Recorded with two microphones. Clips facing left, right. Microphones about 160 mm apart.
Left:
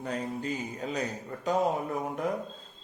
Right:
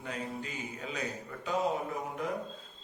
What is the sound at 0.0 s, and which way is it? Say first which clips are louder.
A man's voice: left 5 dB; 40° left (ahead or behind).